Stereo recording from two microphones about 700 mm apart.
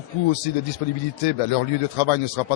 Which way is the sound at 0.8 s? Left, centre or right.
Left.